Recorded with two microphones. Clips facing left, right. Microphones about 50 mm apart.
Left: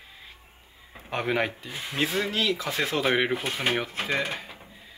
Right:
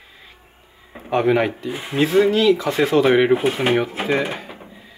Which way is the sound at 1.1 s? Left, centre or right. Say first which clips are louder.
Right 9 dB; centre.